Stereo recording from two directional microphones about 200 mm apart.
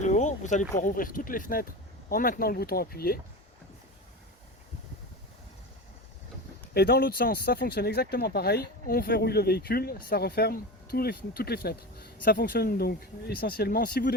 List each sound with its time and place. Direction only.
0.0 s speech: 35° left (ahead or behind)
6.7 s speech: 50° left (ahead or behind)